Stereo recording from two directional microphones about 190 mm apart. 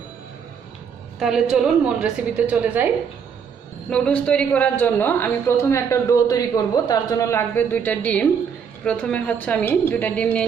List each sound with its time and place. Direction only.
1.2 s a woman's voice: centre (ahead or behind)
3.8 s a woman's voice: 5° left (ahead or behind)